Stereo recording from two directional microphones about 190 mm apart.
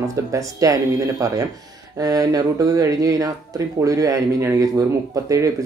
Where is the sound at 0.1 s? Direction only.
15° right (ahead or behind).